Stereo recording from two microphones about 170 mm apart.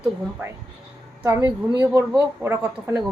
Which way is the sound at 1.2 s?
15° right (ahead or behind).